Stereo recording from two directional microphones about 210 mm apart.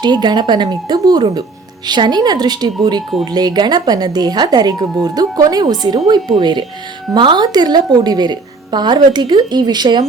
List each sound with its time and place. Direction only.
0.0 s speech: 20° right (ahead or behind)